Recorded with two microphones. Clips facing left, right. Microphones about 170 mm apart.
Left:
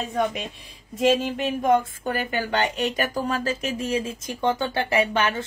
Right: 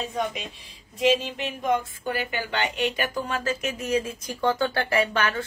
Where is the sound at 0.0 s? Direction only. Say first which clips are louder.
Left 4 dB; 50° left (ahead or behind).